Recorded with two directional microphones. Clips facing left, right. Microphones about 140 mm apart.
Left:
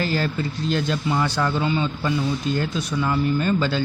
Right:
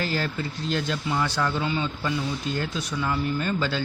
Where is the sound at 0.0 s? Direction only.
40° left (ahead or behind).